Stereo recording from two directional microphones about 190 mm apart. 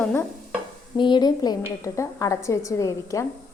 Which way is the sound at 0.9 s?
25° left (ahead or behind).